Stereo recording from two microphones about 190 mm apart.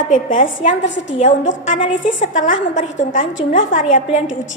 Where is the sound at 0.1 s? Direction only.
45° left (ahead or behind).